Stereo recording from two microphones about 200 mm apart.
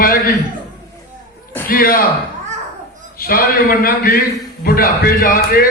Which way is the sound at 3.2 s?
45° left (ahead or behind).